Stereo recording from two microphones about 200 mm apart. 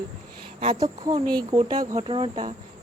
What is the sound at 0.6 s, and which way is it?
Speech, 20° right (ahead or behind).